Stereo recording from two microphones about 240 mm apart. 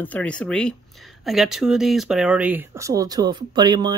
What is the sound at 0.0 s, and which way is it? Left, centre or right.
Speech, centre.